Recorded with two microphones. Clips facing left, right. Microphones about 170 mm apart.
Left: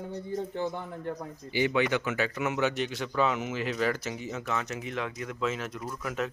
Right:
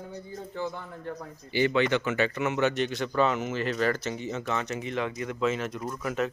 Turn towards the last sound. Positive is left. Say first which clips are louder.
# right 3 dB
turn(degrees=0)  # may be behind; listen again after turning